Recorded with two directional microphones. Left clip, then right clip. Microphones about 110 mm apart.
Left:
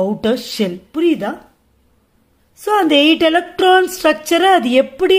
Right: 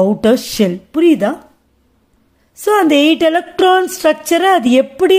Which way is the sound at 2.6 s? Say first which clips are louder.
Right 1 dB; 55° right (ahead or behind).